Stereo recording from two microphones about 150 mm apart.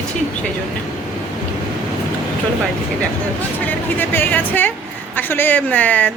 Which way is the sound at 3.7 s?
15° left (ahead or behind).